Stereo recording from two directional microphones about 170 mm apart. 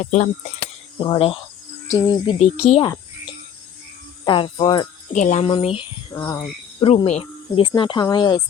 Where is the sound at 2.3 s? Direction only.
40° left (ahead or behind).